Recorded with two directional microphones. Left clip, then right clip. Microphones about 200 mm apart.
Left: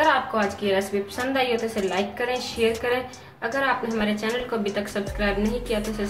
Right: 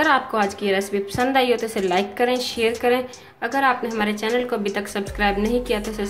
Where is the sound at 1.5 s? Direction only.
Centre (ahead or behind).